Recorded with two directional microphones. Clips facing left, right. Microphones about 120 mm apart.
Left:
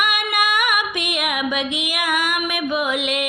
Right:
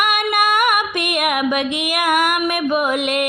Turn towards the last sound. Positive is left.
turn(degrees=-50)  # may be behind; listen again after turning